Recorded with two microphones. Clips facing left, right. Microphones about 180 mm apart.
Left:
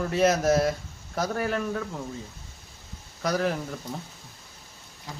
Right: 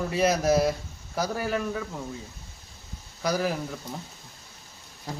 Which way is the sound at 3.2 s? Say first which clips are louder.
Even; 5° right (ahead or behind).